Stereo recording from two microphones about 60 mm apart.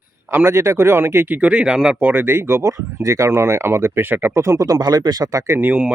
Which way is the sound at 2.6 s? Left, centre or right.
Right.